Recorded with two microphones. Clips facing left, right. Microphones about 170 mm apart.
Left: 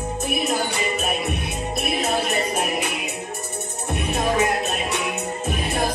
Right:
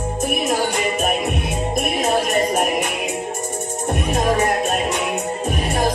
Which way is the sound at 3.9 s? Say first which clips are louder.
Right 3 dB; 40° right (ahead or behind).